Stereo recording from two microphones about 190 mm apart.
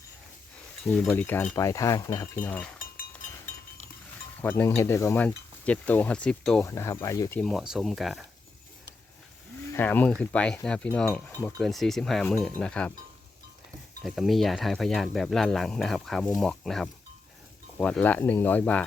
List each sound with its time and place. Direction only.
0.9 s speech: 5° left (ahead or behind)
4.4 s speech: 10° left (ahead or behind)
6.7 s speech: 15° left (ahead or behind)
7.3 s speech: centre (ahead or behind)
9.7 s speech: 10° left (ahead or behind)
14.0 s speech: centre (ahead or behind)